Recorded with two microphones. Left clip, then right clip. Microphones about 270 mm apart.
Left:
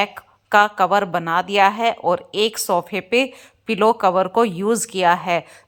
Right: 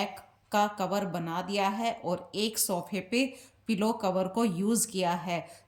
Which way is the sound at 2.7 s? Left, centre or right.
Left.